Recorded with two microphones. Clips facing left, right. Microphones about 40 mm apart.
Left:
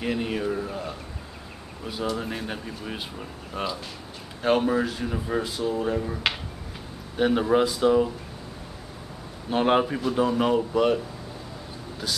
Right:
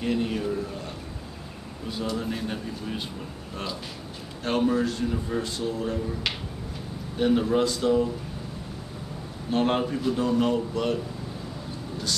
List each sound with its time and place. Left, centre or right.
0.0 s a man's voice: centre
4.4 s speech: centre
5.9 s speech: left
9.5 s speech: centre